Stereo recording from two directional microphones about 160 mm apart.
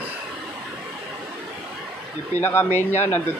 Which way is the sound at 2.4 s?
15° left (ahead or behind).